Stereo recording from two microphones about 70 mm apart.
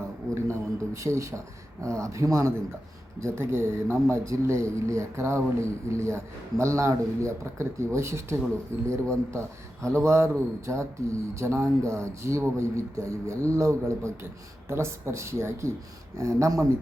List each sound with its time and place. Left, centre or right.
0.9 s speech: right